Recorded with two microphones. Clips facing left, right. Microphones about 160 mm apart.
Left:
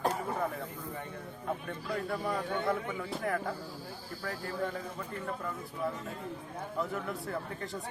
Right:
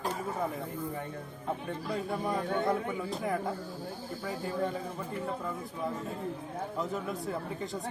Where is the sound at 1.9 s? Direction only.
20° right (ahead or behind).